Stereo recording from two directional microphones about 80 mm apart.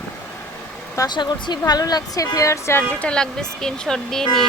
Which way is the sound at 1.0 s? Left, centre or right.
Left.